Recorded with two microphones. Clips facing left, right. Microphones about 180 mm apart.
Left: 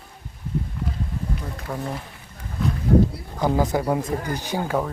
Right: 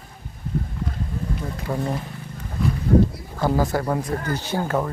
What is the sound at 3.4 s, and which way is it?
Speech, 15° left (ahead or behind).